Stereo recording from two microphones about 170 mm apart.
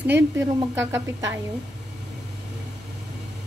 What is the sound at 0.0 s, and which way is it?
Speech, 15° right (ahead or behind).